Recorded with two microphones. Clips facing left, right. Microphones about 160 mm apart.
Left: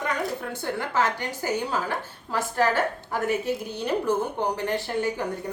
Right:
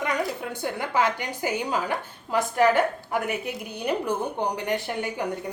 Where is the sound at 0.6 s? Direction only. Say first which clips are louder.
Right 1 dB; 15° right (ahead or behind).